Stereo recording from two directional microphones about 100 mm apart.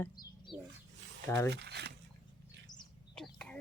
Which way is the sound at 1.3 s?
30° left (ahead or behind).